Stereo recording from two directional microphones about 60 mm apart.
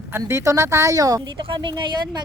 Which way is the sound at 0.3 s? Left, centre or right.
Right.